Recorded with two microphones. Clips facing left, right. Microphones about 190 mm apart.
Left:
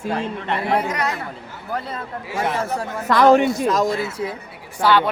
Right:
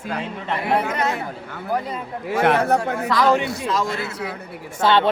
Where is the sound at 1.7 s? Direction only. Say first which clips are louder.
Right 3 dB; 15° right (ahead or behind).